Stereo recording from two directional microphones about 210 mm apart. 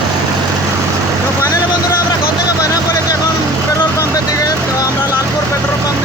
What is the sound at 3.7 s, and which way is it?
Vehicle, 15° left (ahead or behind).